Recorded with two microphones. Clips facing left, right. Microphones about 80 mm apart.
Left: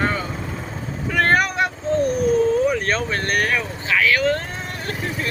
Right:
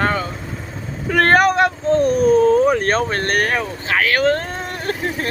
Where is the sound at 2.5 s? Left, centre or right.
Right.